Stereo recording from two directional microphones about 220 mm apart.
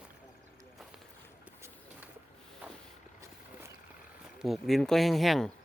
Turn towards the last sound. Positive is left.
turn(degrees=0)  # may be behind; listen again after turning